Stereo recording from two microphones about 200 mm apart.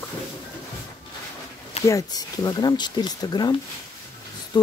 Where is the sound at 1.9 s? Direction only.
15° left (ahead or behind).